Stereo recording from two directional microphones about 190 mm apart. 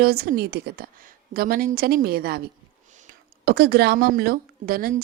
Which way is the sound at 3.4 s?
60° right (ahead or behind).